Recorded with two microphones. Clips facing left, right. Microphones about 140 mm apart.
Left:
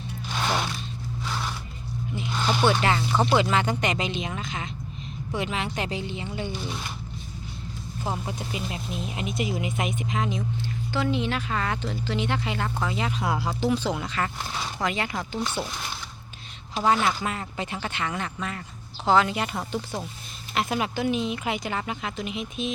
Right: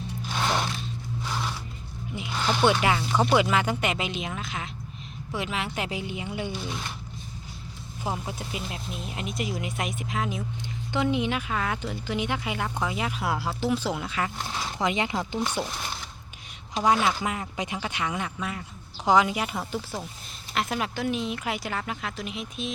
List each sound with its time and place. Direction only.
2.6 s speech: 10° right (ahead or behind)
8.0 s speech: centre (ahead or behind)
10.9 s speech: 15° right (ahead or behind)
14.8 s speech: 20° right (ahead or behind)
16.7 s speech: 10° right (ahead or behind)